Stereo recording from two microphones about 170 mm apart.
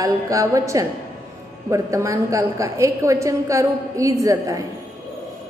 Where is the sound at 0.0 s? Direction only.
20° right (ahead or behind).